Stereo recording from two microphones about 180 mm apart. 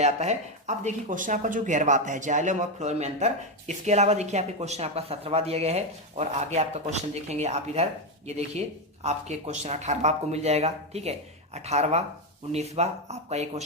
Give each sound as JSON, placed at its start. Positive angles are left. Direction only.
{"t": 0.0, "sound": "speech", "side_deg": -40}
{"t": 9.0, "sound": "speech", "side_deg": -35}